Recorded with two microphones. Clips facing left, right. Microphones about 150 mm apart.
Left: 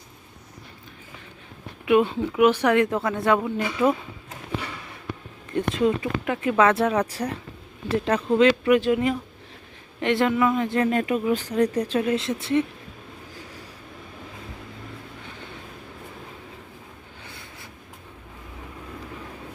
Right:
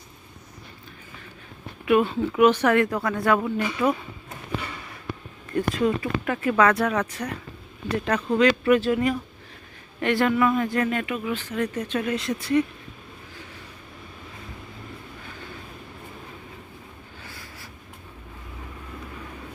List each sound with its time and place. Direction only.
1.8 s speech: 20° left (ahead or behind)
5.5 s speech: 20° left (ahead or behind)
17.2 s a sound: 20° left (ahead or behind)